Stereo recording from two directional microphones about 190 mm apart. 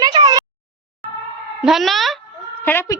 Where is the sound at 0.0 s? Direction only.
20° right (ahead or behind).